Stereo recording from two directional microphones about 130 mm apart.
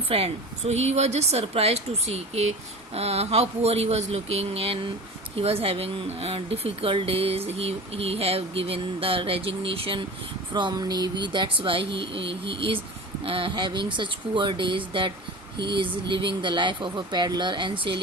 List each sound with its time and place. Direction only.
0.1 s speech: 55° right (ahead or behind)